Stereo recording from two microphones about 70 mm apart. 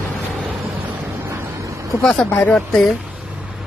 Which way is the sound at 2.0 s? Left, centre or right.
Centre.